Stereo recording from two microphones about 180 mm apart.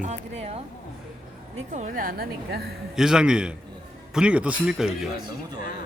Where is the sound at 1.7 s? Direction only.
45° right (ahead or behind).